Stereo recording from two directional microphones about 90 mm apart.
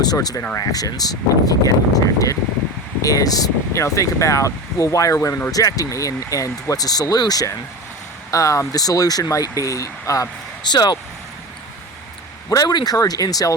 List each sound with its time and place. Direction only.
0.0 s speech: 45° left (ahead or behind)
10.7 s speech: 50° left (ahead or behind)
12.5 s speech: 45° left (ahead or behind)